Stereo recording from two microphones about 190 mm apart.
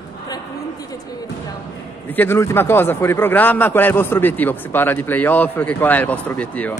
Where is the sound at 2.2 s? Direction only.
15° left (ahead or behind).